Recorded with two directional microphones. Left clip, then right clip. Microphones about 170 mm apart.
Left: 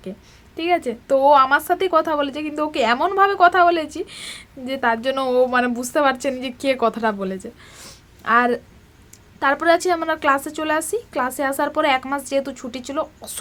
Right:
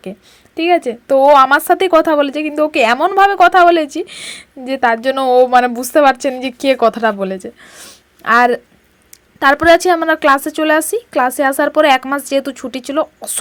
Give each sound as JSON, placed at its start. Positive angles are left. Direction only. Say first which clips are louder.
{"t": 0.5, "sound": "speech", "louder": "right 7 dB", "side_deg": -40}